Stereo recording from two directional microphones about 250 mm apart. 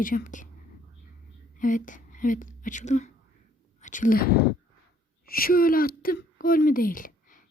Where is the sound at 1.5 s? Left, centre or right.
Left.